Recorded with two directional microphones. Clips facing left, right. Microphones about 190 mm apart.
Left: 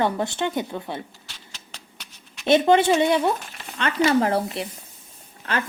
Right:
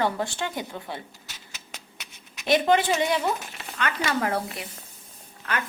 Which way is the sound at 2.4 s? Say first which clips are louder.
Left 4 dB; 25° left (ahead or behind).